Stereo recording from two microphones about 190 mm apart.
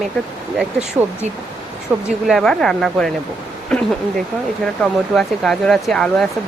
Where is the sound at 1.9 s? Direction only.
10° right (ahead or behind).